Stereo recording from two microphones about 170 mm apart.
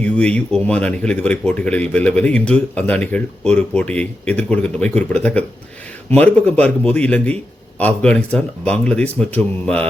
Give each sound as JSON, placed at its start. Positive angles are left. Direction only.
{"t": 0.0, "sound": "speech", "side_deg": 5}